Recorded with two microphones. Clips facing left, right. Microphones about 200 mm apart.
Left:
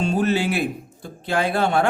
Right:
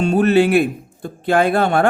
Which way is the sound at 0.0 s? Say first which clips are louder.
Right 7 dB; 60° right (ahead or behind).